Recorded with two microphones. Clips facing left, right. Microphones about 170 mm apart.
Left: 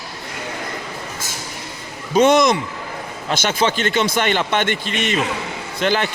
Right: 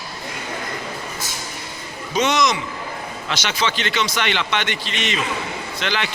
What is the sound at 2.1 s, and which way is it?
A man's voice, 55° left (ahead or behind).